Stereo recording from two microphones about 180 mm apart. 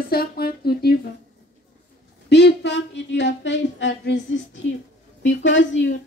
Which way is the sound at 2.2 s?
70° left (ahead or behind).